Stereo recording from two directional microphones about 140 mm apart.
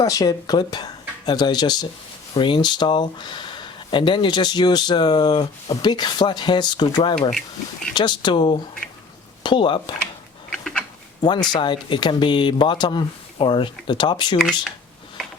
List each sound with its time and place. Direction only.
0.0 s speech: 25° left (ahead or behind)
7.3 s speech: 5° left (ahead or behind)
7.9 s speech: 30° left (ahead or behind)
10.5 s a sound: 5° left (ahead or behind)
11.2 s speech: 30° left (ahead or behind)